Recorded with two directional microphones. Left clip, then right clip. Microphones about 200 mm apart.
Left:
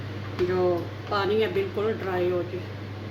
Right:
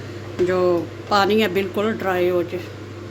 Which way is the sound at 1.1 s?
65° right (ahead or behind).